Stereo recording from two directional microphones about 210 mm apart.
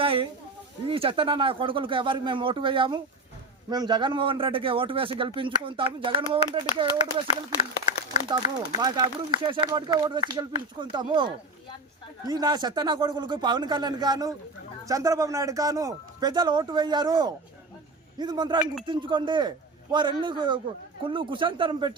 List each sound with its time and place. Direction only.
0.0 s a sound: 25° right (ahead or behind)
0.9 s a man's voice: 25° right (ahead or behind)
8.8 s a man's voice: 20° right (ahead or behind)